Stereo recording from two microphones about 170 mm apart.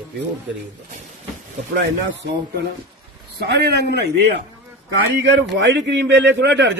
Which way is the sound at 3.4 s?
75° right (ahead or behind).